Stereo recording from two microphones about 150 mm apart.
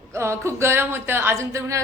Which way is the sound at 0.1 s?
20° right (ahead or behind).